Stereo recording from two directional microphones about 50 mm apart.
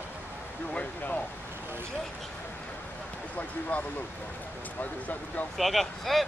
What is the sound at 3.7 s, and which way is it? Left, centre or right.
Speech, left.